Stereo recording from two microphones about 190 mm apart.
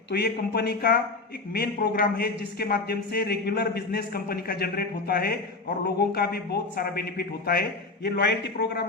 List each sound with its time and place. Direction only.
0.1 s a man's voice: 60° left (ahead or behind)